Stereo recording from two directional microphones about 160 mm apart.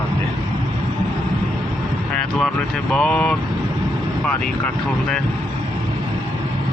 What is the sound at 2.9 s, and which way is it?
Speech, 5° left (ahead or behind).